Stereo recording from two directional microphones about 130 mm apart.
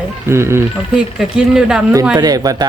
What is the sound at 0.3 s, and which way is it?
Speech, 20° right (ahead or behind).